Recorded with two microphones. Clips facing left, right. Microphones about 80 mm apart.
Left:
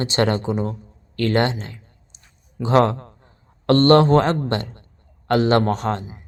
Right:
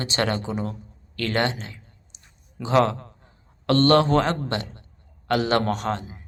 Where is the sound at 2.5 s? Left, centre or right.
Left.